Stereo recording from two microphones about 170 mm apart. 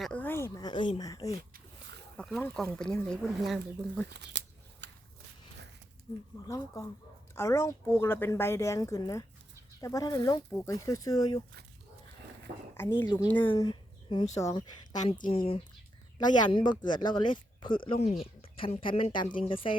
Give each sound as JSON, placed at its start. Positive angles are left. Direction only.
{"t": 0.0, "sound": "speech", "side_deg": 10}
{"t": 1.4, "sound": "wild animals", "side_deg": -60}
{"t": 2.1, "sound": "speech", "side_deg": 0}
{"t": 4.1, "sound": "a sound", "side_deg": -90}
{"t": 6.1, "sound": "speech", "side_deg": 40}
{"t": 6.4, "sound": "speech", "side_deg": 20}
{"t": 12.7, "sound": "speech", "side_deg": 15}
{"t": 13.1, "sound": "speech", "side_deg": 25}
{"t": 15.0, "sound": "speech", "side_deg": 40}